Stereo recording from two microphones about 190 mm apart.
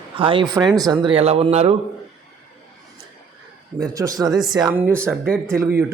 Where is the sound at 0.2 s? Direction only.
25° right (ahead or behind).